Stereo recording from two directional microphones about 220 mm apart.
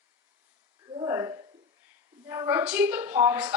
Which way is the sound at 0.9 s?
15° right (ahead or behind).